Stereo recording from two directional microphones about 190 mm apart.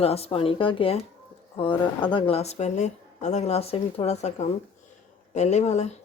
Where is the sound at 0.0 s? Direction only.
30° left (ahead or behind).